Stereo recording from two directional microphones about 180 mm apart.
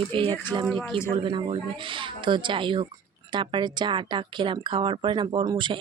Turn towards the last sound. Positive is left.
turn(degrees=-25)  # may be behind; listen again after turning